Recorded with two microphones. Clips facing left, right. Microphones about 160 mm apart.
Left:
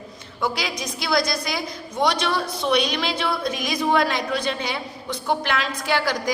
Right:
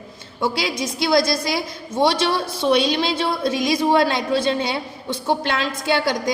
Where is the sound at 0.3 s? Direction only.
25° right (ahead or behind).